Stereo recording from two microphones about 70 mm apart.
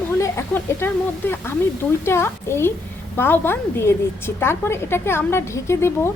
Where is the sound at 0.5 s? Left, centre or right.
Left.